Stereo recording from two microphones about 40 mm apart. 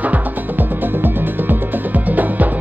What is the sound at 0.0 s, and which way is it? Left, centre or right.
Music, right.